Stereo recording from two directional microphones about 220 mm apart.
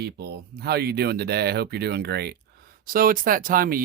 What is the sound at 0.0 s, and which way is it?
Speech, 45° right (ahead or behind).